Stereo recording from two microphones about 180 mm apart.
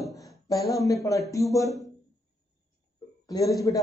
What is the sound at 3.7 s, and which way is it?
Speech, 20° left (ahead or behind).